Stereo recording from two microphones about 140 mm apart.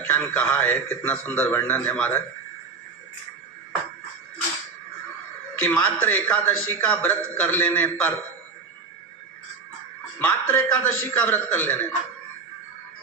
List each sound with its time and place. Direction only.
0.0 s a man's voice: 10° left (ahead or behind)
5.5 s a man's voice: 10° left (ahead or behind)
10.2 s a man's voice: 10° left (ahead or behind)